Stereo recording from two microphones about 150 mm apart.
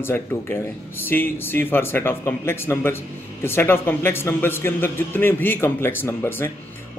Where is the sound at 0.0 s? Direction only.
15° left (ahead or behind).